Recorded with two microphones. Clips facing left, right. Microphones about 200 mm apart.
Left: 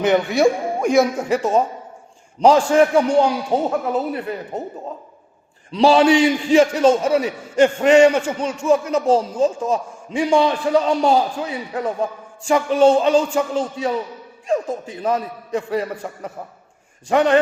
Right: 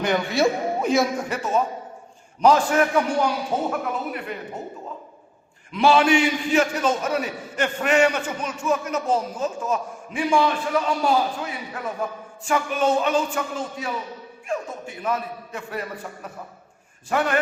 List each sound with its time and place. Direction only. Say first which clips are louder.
0.0 s a man's voice: left 5 dB; 20° left (ahead or behind)
1.3 s a man's voice: left 6 dB; 30° left (ahead or behind)
5.7 s a man's voice: left 4 dB; 30° left (ahead or behind)